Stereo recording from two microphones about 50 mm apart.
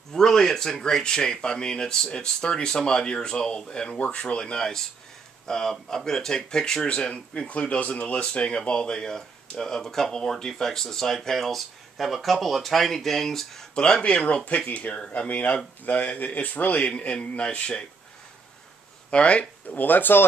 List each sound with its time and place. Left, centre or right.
0.1 s speech: centre
13.7 s a man's voice: centre
14.7 s speech: left
16.8 s a man's voice: left
19.0 s speech: left
19.8 s speech: left